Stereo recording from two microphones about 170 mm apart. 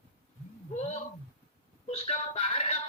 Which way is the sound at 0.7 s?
40° left (ahead or behind).